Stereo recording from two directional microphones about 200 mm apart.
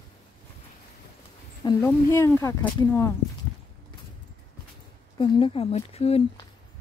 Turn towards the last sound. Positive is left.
turn(degrees=30)  # may be behind; listen again after turning